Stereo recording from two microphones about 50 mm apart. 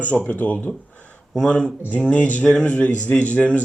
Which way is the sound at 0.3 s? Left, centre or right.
Left.